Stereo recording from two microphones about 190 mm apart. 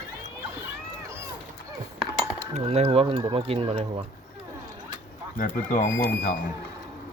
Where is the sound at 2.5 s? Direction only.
35° right (ahead or behind).